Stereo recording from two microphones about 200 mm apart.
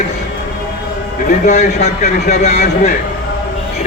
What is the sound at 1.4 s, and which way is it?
A man's voice, 35° left (ahead or behind).